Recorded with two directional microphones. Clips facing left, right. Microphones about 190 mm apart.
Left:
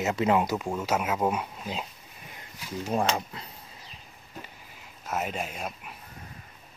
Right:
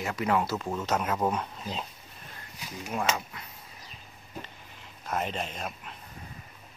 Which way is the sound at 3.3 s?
30° left (ahead or behind).